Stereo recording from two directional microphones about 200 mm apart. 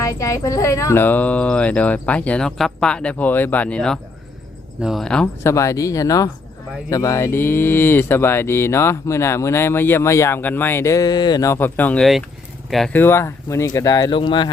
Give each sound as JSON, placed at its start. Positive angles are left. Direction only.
{"t": 0.0, "sound": "speech", "side_deg": 15}